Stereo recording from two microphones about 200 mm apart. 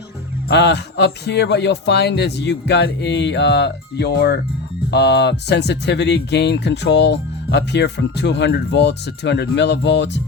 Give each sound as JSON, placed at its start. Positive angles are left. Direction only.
{"t": 0.4, "sound": "speech", "side_deg": 55}